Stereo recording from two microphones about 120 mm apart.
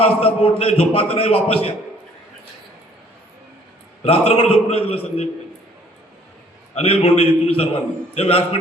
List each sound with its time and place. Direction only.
0.0 s a man's voice: 55° left (ahead or behind)
4.0 s a man's voice: 55° left (ahead or behind)
6.7 s a man's voice: 55° left (ahead or behind)